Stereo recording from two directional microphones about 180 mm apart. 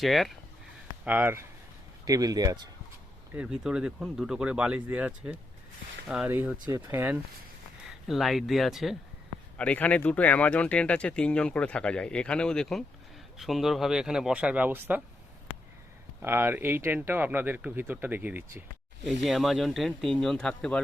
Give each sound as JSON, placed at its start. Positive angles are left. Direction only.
{"t": 0.0, "sound": "speech", "side_deg": 0}
{"t": 1.0, "sound": "speech", "side_deg": -10}
{"t": 3.3, "sound": "speech", "side_deg": -5}
{"t": 16.2, "sound": "speech", "side_deg": -10}